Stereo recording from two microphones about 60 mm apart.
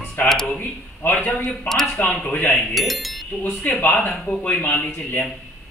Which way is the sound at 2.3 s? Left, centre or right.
Left.